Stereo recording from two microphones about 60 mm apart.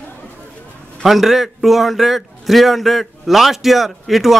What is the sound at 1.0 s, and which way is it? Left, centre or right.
A man's voice, centre.